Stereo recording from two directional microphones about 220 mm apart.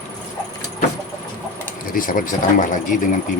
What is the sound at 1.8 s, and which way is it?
Speech, 40° left (ahead or behind).